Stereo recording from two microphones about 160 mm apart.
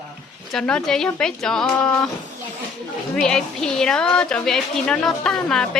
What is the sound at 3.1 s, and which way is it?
A woman's voice, 5° left (ahead or behind).